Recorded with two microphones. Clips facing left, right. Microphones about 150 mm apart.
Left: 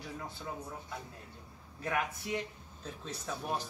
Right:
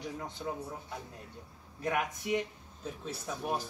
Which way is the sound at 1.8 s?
15° right (ahead or behind).